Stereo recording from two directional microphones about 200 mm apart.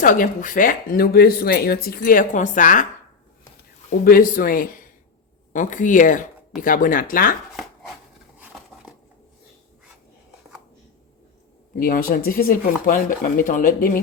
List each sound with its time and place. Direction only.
0.0 s speech: 40° left (ahead or behind)
3.8 s speech: 45° left (ahead or behind)
8.4 s a sound: 5° right (ahead or behind)
11.8 s speech: 45° left (ahead or behind)